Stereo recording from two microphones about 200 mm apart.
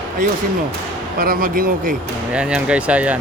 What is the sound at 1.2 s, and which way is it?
Speech, 45° right (ahead or behind).